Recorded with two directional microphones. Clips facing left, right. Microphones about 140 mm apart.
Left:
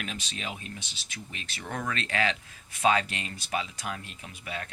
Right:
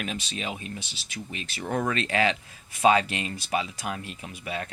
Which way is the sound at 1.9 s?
15° right (ahead or behind).